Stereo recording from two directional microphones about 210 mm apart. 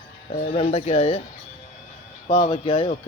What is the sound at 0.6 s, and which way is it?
Speech, 30° left (ahead or behind).